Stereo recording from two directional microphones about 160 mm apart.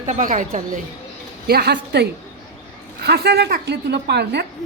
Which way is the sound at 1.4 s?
85° right.